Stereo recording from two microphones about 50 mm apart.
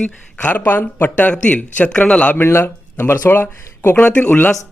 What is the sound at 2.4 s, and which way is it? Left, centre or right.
Speech, left.